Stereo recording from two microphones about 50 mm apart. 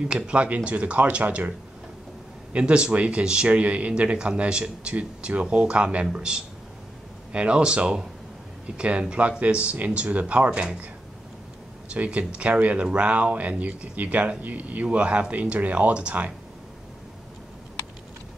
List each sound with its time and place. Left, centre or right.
0.1 s speech: right
2.5 s a man's voice: right
11.9 s speech: right